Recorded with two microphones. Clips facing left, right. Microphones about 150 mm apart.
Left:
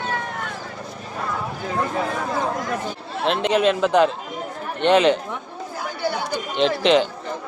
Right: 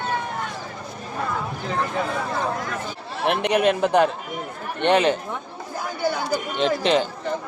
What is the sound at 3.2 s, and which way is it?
Speech, 60° right (ahead or behind).